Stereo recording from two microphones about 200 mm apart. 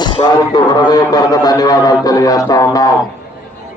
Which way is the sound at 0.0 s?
20° left (ahead or behind).